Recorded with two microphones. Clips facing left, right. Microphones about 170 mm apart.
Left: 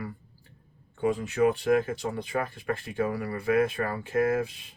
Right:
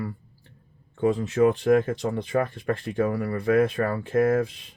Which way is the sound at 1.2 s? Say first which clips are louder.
Right 3 dB; 35° right (ahead or behind).